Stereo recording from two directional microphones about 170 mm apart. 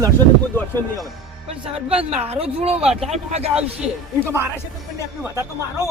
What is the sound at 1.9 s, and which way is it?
Speech, 35° right (ahead or behind).